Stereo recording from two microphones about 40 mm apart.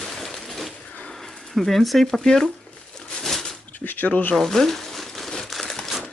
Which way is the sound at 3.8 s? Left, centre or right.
Left.